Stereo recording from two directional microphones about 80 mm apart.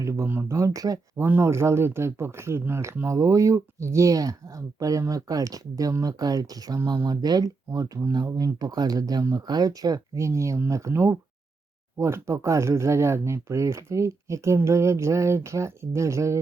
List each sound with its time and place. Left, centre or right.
0.0 s speech: right
0.3 s speech: right
0.5 s speech: right
1.1 s speech: right
1.4 s speech: right